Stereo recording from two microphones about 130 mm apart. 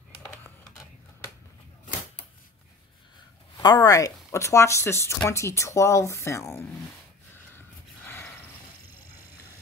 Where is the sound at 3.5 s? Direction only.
30° left (ahead or behind).